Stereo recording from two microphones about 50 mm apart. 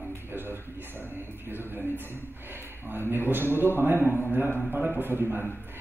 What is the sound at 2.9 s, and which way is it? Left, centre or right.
A man's voice, right.